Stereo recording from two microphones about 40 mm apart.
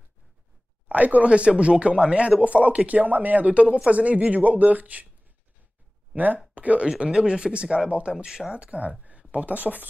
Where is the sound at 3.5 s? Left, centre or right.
Right.